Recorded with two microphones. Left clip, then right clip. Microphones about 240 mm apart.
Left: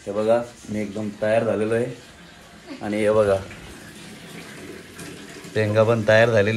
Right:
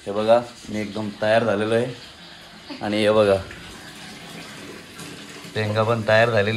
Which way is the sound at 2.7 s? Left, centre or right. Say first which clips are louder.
Right 1 dB; right.